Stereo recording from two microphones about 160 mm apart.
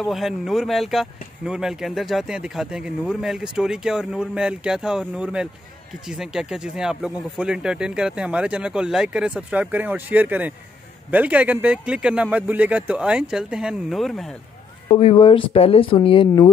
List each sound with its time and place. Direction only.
0.0 s speech: centre (ahead or behind)
14.9 s speech: 35° left (ahead or behind)